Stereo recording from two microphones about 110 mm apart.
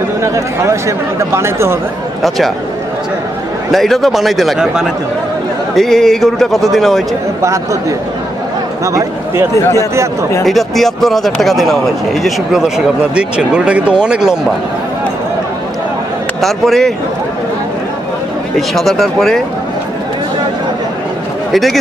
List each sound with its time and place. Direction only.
0.2 s speech: 25° right (ahead or behind)
2.2 s a man's voice: centre (ahead or behind)
3.7 s a man's voice: centre (ahead or behind)
8.8 s speech: 25° right (ahead or behind)
10.4 s a man's voice: centre (ahead or behind)
16.3 s a man's voice: centre (ahead or behind)
18.8 s a man's voice: centre (ahead or behind)
21.5 s a man's voice: centre (ahead or behind)